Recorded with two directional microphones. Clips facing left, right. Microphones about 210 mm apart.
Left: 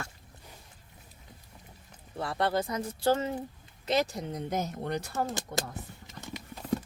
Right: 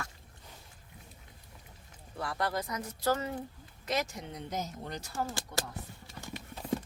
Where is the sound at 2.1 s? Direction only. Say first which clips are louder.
Left 5 dB; 25° left (ahead or behind); by 5.2 s 60° left (ahead or behind).